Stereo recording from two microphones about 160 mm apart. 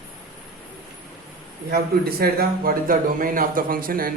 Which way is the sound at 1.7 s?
75° right (ahead or behind).